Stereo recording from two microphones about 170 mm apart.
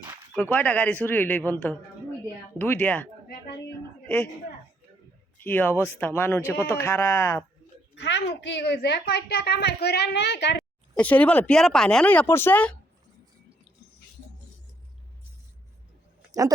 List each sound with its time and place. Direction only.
0.3 s speech: 10° left (ahead or behind)
5.4 s speech: 10° left (ahead or behind)
7.9 s a woman's voice: 90° left
10.9 s speech: 10° left (ahead or behind)